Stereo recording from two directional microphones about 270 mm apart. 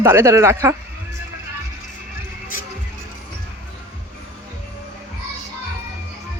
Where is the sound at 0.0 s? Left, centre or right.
Centre.